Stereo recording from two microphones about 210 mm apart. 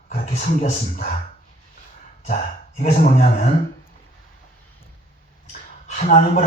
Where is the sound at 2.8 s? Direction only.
30° left (ahead or behind).